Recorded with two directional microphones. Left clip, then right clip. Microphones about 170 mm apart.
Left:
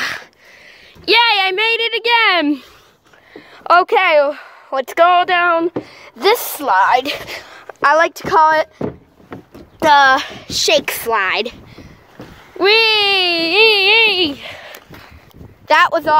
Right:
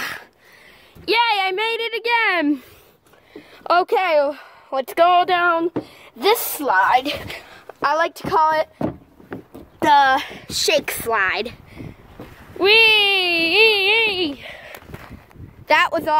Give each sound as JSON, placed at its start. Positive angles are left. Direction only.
{"t": 0.0, "sound": "a sound", "side_deg": 5}
{"t": 1.0, "sound": "a woman's voice", "side_deg": 0}
{"t": 3.3, "sound": "a woman's voice", "side_deg": -15}
{"t": 5.8, "sound": "a woman's voice", "side_deg": 0}
{"t": 6.6, "sound": "speech", "side_deg": 25}
{"t": 6.9, "sound": "a woman's voice", "side_deg": 45}
{"t": 7.4, "sound": "a woman's voice", "side_deg": 0}
{"t": 9.8, "sound": "a woman's voice", "side_deg": 10}
{"t": 10.7, "sound": "a woman's voice", "side_deg": 15}
{"t": 12.5, "sound": "speech", "side_deg": 10}
{"t": 15.6, "sound": "a woman's voice", "side_deg": 0}